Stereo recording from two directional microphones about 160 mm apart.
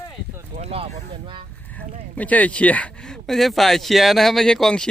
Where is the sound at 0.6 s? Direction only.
40° right (ahead or behind).